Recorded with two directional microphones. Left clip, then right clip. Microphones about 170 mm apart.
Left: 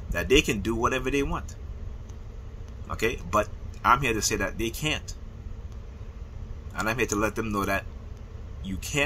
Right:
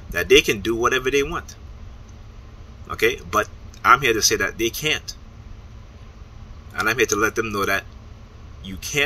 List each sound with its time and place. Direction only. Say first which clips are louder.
0.1 s speech: right 7 dB; 20° left (ahead or behind)
2.9 s speech: right 6 dB; 15° left (ahead or behind)
6.7 s speech: right 7 dB; 20° left (ahead or behind)